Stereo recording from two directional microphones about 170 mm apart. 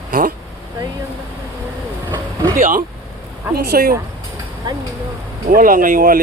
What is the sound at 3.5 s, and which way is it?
Speech, 60° right (ahead or behind).